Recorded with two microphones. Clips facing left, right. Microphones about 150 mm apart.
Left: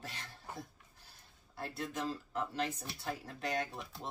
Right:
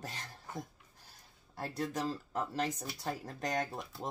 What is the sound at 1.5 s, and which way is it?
Speech, 40° right (ahead or behind).